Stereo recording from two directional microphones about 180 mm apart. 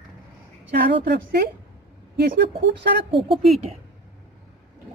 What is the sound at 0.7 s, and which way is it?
Speech, 65° right (ahead or behind).